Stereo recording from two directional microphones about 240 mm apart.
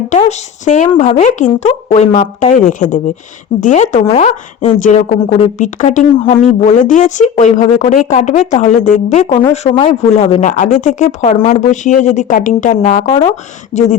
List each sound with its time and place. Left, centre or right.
0.1 s a woman's voice: left
13.1 s a woman's voice: centre